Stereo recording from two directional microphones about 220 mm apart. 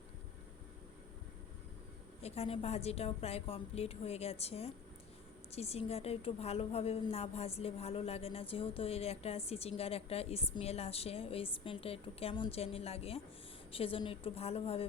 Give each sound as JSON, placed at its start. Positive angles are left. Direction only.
{"t": 2.2, "sound": "a woman's voice", "side_deg": 30}